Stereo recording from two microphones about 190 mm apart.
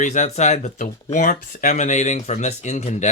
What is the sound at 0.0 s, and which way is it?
Speech, 40° left (ahead or behind).